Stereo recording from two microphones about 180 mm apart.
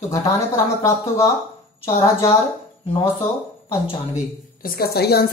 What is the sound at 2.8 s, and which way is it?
Speech, 30° left (ahead or behind).